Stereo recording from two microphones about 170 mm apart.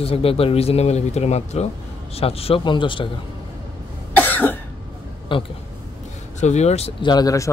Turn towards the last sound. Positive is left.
turn(degrees=20)  # may be behind; listen again after turning